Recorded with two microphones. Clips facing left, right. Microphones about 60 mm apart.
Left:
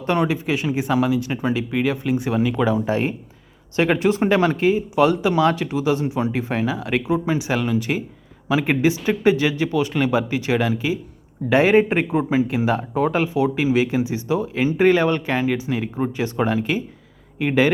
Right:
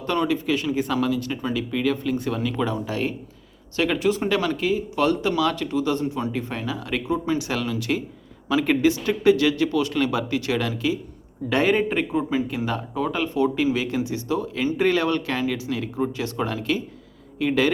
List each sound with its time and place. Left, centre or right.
0.0 s speech: left
0.3 s speech: centre
2.8 s speech: left
4.9 s speech: centre